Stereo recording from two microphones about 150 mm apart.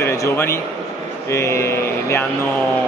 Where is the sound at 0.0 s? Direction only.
20° left (ahead or behind).